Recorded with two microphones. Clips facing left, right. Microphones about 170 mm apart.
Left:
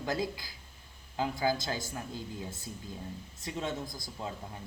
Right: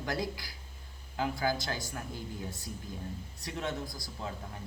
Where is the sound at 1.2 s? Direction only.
20° left (ahead or behind).